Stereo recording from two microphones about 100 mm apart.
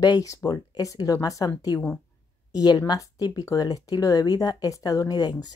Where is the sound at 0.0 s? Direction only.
35° left (ahead or behind).